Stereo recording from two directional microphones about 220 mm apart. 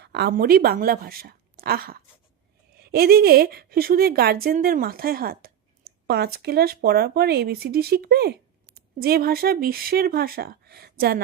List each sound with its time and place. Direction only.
0.0 s a woman's voice: 50° right (ahead or behind)